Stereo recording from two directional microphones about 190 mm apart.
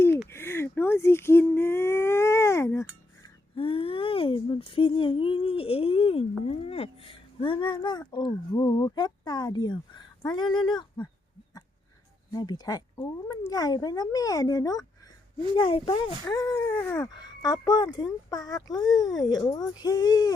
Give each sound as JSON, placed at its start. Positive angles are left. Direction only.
{"t": 0.3, "sound": "whimper", "side_deg": 15}
{"t": 3.5, "sound": "a sound", "side_deg": 30}
{"t": 6.5, "sound": "speech", "side_deg": 30}
{"t": 12.3, "sound": "speech", "side_deg": 20}